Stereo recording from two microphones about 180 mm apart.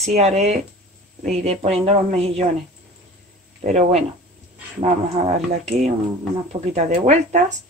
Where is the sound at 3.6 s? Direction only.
40° right (ahead or behind).